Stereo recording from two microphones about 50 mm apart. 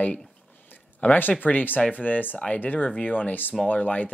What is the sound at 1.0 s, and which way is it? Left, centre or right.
Speech, left.